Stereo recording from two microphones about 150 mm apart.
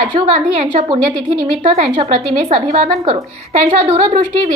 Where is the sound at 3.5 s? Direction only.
50° right (ahead or behind).